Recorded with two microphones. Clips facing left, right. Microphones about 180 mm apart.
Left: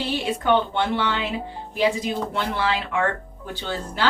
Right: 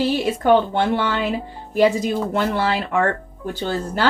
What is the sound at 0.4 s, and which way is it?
Speech, 45° right (ahead or behind).